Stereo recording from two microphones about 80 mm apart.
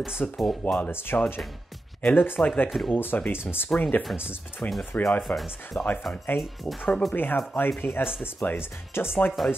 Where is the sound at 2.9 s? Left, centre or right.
Left.